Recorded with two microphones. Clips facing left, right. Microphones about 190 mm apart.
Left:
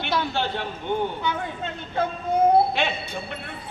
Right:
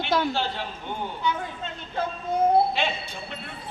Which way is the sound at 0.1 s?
45° right (ahead or behind).